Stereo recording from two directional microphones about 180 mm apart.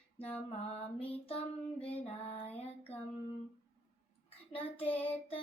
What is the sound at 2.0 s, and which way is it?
Female singing, 35° left (ahead or behind).